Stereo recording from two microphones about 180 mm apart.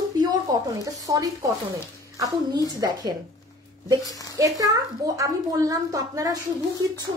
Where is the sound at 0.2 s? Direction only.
20° right (ahead or behind).